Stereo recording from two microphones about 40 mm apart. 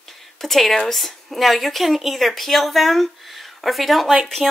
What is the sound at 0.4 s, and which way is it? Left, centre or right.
Speech, centre.